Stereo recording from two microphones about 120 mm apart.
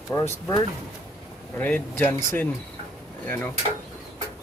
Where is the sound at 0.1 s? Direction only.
25° left (ahead or behind).